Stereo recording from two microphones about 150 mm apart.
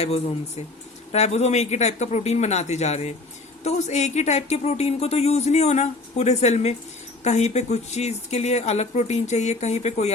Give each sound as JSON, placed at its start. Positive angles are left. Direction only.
{"t": 0.0, "sound": "speech", "side_deg": 45}